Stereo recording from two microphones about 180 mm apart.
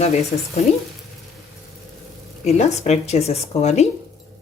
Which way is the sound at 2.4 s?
40° left (ahead or behind).